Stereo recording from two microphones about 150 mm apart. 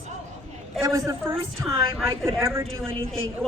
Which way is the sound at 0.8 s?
20° right (ahead or behind).